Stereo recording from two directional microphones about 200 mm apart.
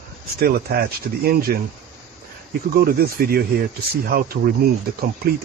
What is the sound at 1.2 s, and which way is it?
Speech, 50° right (ahead or behind).